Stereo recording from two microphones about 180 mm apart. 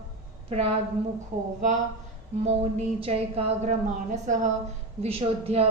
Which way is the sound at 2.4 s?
35° right (ahead or behind).